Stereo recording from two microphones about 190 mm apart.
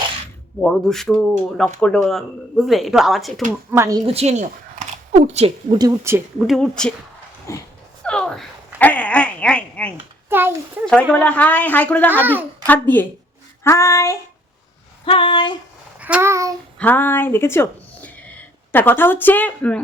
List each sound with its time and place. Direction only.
0.6 s speech: 5° left (ahead or behind)
3.7 s speech: 15° right (ahead or behind)
4.0 s speech: 35° right (ahead or behind)
5.7 s speech: 20° right (ahead or behind)
6.5 s speech: 5° left (ahead or behind)
7.5 s speech: 15° left (ahead or behind)
8.0 s a sound: 5° left (ahead or behind)
10.2 s a child's voice: 10° right (ahead or behind)
11.1 s speech: 5° left (ahead or behind)
12.2 s speech: 10° right (ahead or behind)
12.6 s speech: 10° left (ahead or behind)
15.0 s a sound: 25° left (ahead or behind)
16.0 s child singing: 5° right (ahead or behind)
16.7 s a woman's voice: 10° left (ahead or behind)